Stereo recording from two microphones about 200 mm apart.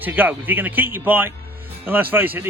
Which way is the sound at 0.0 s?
10° right (ahead or behind).